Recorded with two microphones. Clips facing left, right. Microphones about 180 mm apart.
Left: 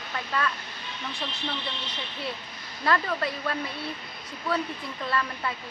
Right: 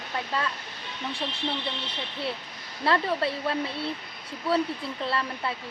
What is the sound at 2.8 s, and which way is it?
Speech, 30° right (ahead or behind).